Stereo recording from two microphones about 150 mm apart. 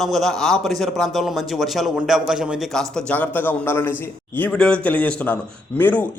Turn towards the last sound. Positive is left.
turn(degrees=15)  # may be behind; listen again after turning